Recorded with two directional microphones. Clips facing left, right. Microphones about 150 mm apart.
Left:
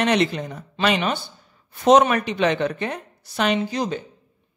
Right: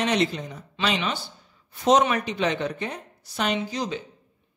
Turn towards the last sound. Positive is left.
turn(degrees=50)  # may be behind; listen again after turning